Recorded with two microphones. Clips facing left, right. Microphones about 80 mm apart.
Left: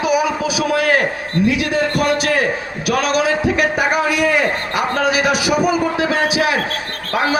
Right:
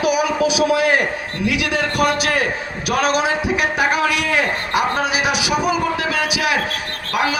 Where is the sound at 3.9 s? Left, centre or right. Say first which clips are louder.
Left 2 dB; left.